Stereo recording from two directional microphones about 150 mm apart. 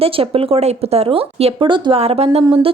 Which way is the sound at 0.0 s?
40° right (ahead or behind).